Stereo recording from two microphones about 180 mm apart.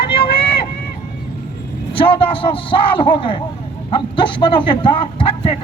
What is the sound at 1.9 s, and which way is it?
A man's voice, 30° left (ahead or behind).